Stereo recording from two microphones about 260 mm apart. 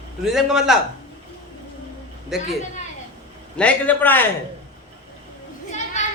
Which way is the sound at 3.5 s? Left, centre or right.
Centre.